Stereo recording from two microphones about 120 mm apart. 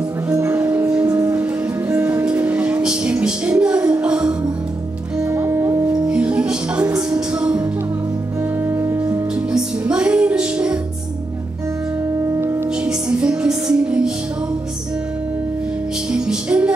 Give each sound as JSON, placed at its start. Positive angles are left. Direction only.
{"t": 0.4, "sound": "music", "side_deg": -15}
{"t": 5.3, "sound": "music", "side_deg": -20}
{"t": 6.0, "sound": "music", "side_deg": -10}
{"t": 8.6, "sound": "music", "side_deg": -20}
{"t": 9.5, "sound": "music", "side_deg": -10}
{"t": 12.8, "sound": "music", "side_deg": -10}
{"t": 16.1, "sound": "music", "side_deg": -5}